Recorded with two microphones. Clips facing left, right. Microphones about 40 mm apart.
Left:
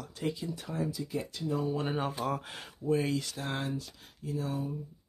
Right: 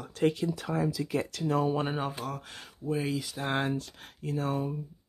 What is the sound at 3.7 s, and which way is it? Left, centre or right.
Speech, right.